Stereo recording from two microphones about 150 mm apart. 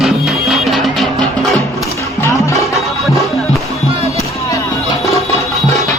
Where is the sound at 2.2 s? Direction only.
20° left (ahead or behind).